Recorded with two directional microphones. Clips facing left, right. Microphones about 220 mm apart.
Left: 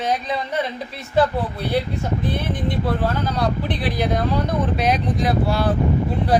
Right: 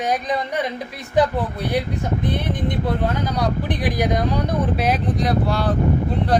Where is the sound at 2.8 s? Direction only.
15° right (ahead or behind).